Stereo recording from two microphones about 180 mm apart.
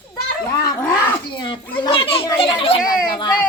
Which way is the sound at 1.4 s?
25° left (ahead or behind).